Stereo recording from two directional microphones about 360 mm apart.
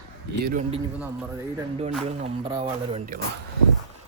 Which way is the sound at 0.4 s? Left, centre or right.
Right.